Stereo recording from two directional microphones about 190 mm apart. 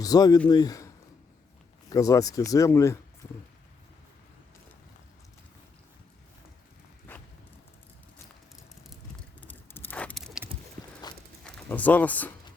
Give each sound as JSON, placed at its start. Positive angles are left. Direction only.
{"t": 0.0, "sound": "a man's voice", "side_deg": 20}
{"t": 1.9, "sound": "speech", "side_deg": 20}
{"t": 7.1, "sound": "a sound", "side_deg": 10}
{"t": 9.4, "sound": "horse", "side_deg": 10}
{"t": 11.0, "sound": "walk", "side_deg": 20}
{"t": 11.4, "sound": "speech", "side_deg": 5}